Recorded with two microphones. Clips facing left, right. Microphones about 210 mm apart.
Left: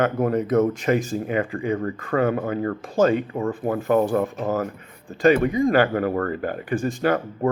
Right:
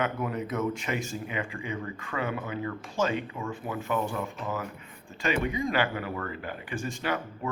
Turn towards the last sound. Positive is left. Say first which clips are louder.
# left 10 dB
turn(degrees=50)  # may be behind; listen again after turning